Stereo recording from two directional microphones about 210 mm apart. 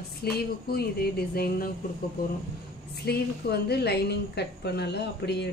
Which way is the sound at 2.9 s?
50° left (ahead or behind).